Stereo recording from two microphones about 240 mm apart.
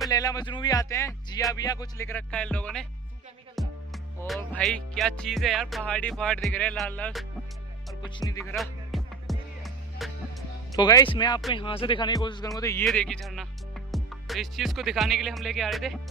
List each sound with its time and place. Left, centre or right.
0.1 s speech: centre
3.5 s music: centre
8.0 s speech: centre
8.5 s music: centre
10.8 s speech: centre